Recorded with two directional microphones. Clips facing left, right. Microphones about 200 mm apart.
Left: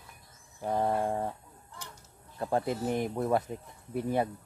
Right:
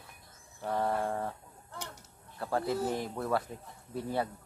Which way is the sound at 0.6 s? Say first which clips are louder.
Left 3 dB; 20° left (ahead or behind).